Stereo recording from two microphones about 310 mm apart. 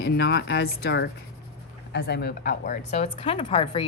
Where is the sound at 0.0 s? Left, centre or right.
Left.